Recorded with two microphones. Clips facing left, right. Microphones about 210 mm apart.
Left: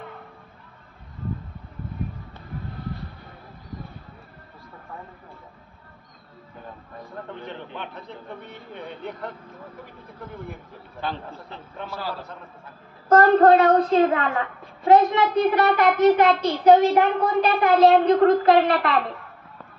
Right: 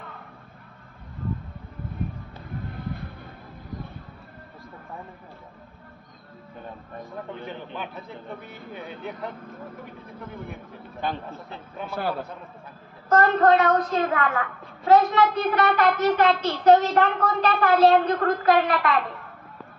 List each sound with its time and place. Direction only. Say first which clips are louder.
7.4 s a man's voice: even; 5° right (ahead or behind)
11.9 s a man's voice: right 5 dB; 55° right (ahead or behind)
13.1 s a child's voice: left 4 dB; 35° left (ahead or behind)